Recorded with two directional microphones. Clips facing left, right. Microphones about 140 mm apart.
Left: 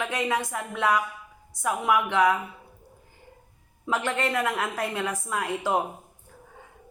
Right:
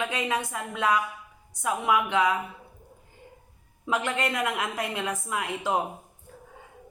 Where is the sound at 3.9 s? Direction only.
15° right (ahead or behind).